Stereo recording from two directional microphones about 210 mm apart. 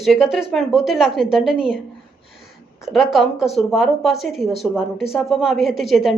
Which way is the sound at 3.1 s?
Centre (ahead or behind).